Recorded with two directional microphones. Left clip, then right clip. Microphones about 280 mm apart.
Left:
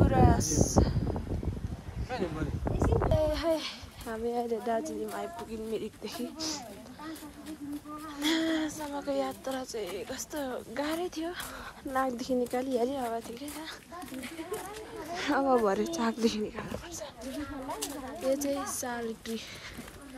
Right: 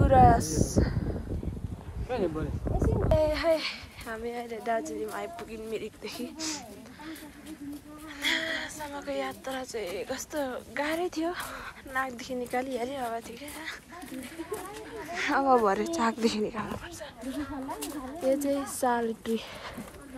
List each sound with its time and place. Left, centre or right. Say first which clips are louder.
0.0 s a sound: right 6 dB; centre
2.6 s a sound: left 2 dB; centre
4.8 s a woman's voice: right 1 dB; centre
8.2 s a woman's voice: even; left
11.9 s a woman's voice: left 2 dB; centre
15.1 s a woman's voice: right 3 dB; centre